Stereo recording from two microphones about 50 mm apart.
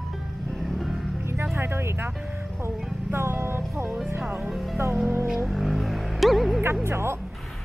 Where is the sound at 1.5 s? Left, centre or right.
Right.